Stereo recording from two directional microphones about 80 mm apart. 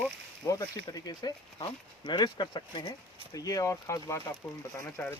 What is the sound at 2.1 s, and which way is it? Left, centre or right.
Speech, left.